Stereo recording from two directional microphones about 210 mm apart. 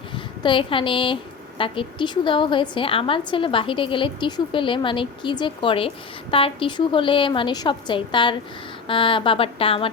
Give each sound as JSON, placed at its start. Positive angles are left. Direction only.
{"t": 0.4, "sound": "a woman's voice", "side_deg": 25}